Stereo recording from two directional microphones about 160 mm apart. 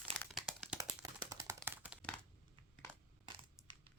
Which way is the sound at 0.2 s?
Centre (ahead or behind).